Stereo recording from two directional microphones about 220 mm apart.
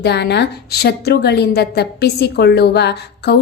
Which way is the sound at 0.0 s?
50° left (ahead or behind).